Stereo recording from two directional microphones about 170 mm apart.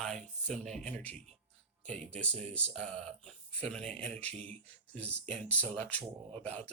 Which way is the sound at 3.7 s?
5° left (ahead or behind).